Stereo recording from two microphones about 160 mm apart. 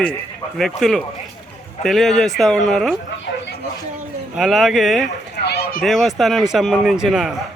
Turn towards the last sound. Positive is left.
turn(degrees=0)  # may be behind; listen again after turning